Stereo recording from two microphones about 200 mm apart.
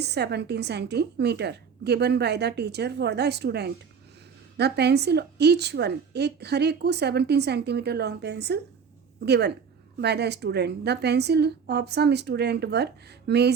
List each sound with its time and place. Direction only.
0.0 s a woman's voice: 55° right (ahead or behind)